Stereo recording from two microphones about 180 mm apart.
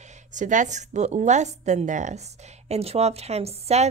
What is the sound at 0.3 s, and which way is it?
A woman's voice, 45° right (ahead or behind).